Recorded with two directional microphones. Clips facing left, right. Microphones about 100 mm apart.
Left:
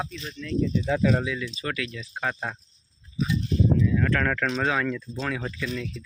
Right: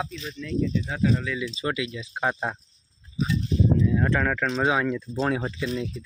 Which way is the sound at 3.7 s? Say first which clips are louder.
Right 1 dB; 25° right (ahead or behind).